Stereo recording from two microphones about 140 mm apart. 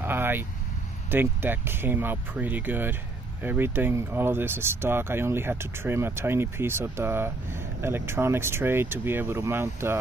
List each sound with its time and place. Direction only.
0.0 s vehicle: 15° right (ahead or behind)
1.1 s speech: 15° right (ahead or behind)